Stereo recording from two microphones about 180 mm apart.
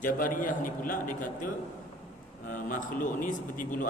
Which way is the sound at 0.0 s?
45° left (ahead or behind).